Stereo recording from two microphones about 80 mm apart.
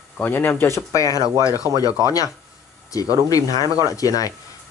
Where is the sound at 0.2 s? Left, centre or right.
Left.